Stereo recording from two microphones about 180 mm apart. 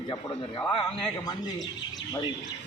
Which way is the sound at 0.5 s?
25° left (ahead or behind).